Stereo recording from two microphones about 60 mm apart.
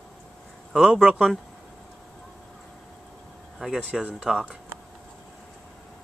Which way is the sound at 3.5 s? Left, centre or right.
Centre.